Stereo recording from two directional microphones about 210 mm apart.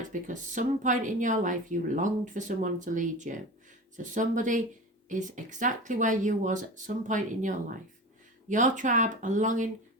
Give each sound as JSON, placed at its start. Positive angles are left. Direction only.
{"t": 0.0, "sound": "speech", "side_deg": -35}